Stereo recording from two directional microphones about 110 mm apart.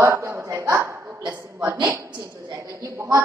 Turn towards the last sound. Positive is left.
turn(degrees=-30)  # may be behind; listen again after turning